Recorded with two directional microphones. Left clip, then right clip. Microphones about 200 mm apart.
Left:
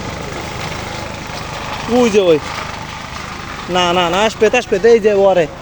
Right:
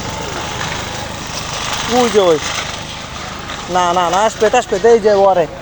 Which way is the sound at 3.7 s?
30° left (ahead or behind).